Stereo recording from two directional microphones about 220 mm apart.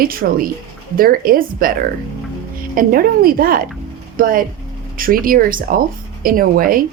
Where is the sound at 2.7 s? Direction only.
40° right (ahead or behind).